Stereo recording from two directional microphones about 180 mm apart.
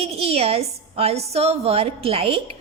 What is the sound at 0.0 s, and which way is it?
A woman's voice, 35° right (ahead or behind).